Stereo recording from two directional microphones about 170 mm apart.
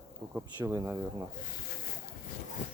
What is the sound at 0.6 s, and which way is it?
Speech, 15° right (ahead or behind).